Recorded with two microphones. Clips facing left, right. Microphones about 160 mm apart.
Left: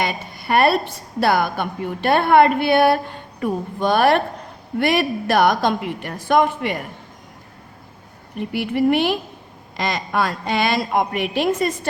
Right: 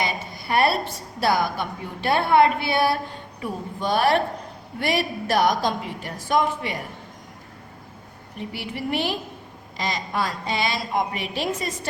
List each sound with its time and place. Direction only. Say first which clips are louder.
0.0 s a sound: left 3 dB; 60° left (ahead or behind)
1.2 s a woman's voice: left 4 dB; 60° left (ahead or behind)
8.4 s a woman's voice: left 11 dB; 55° left (ahead or behind)